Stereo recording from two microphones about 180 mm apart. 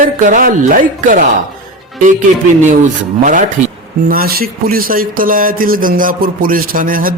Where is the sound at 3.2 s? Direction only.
45° right (ahead or behind).